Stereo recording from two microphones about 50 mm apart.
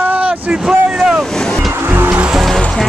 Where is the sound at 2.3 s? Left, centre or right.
Centre.